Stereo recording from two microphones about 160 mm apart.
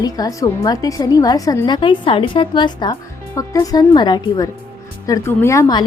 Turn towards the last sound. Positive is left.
turn(degrees=15)  # may be behind; listen again after turning